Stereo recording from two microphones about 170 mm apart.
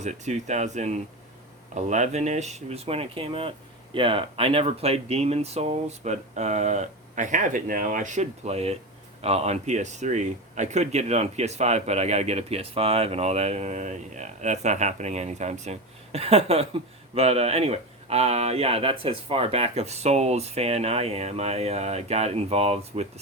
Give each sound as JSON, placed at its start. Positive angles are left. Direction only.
{"t": 0.0, "sound": "speech", "side_deg": -45}